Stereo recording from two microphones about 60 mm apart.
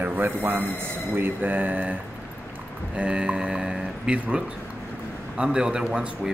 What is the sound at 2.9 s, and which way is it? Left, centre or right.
Speech, centre.